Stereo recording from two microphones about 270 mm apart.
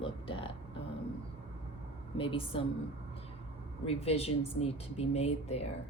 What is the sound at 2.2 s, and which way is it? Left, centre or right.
Speech, centre.